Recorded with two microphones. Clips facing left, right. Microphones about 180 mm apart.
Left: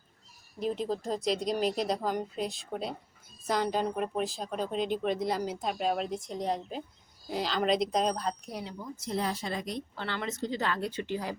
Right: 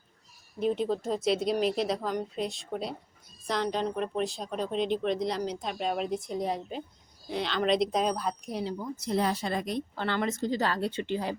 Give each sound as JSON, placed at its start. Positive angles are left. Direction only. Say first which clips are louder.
{"t": 0.6, "sound": "speech", "louder": "right 3 dB", "side_deg": 0}
{"t": 9.1, "sound": "a woman's voice", "louder": "right 4 dB", "side_deg": -65}